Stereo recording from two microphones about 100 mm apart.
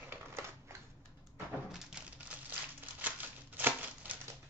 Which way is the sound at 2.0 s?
10° right (ahead or behind).